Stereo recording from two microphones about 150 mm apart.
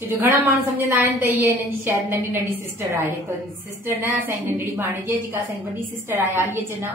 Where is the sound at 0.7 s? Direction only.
15° right (ahead or behind).